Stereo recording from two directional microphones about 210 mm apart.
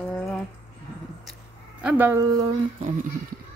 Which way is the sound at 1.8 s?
10° right (ahead or behind).